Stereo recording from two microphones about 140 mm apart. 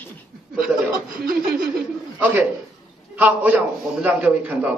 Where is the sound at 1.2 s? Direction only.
90° right.